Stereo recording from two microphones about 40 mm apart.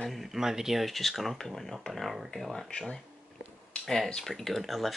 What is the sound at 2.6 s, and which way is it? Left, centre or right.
Speech, left.